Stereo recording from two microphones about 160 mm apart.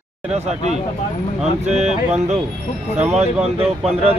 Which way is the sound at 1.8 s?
45° right (ahead or behind).